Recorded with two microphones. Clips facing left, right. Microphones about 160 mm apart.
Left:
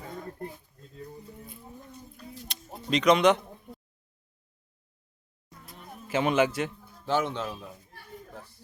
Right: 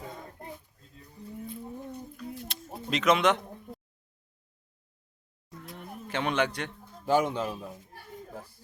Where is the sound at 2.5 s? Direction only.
Centre (ahead or behind).